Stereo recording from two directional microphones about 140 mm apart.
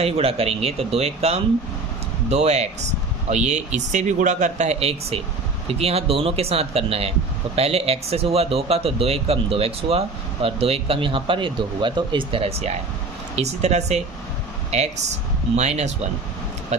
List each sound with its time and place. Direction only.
0.0 s speech: 45° right (ahead or behind)